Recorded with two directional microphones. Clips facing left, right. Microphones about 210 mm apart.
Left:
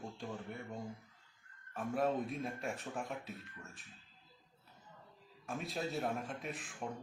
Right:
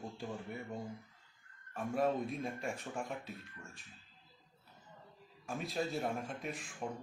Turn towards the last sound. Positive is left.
turn(degrees=0)  # may be behind; listen again after turning